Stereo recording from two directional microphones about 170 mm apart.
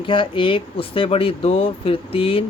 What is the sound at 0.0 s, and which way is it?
Speech, 30° left (ahead or behind).